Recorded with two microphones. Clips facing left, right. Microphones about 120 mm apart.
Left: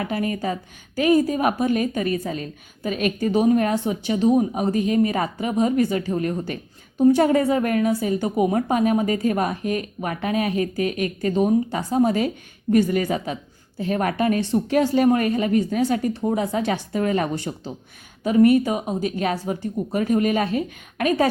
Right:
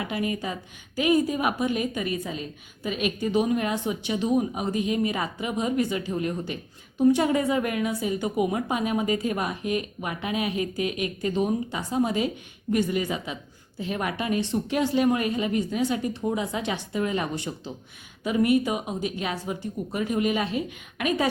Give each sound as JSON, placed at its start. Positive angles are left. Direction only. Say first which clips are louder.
{"t": 0.0, "sound": "a woman's voice", "louder": "left 4 dB", "side_deg": 40}